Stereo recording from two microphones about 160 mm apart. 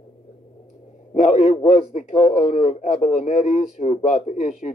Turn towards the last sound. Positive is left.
turn(degrees=50)  # may be behind; listen again after turning